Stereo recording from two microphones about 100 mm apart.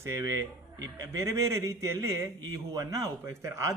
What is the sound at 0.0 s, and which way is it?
A man's voice, 30° right (ahead or behind).